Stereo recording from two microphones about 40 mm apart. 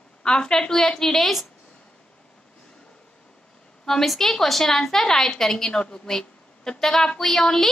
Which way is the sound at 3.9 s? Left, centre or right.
Centre.